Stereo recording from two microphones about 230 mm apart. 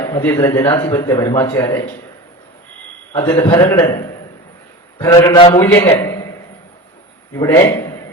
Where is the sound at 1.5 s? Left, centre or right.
Centre.